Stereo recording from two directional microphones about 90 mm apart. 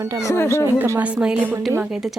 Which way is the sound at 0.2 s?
30° left (ahead or behind).